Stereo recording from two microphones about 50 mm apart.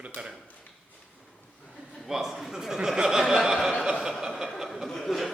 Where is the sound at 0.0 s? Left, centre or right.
Right.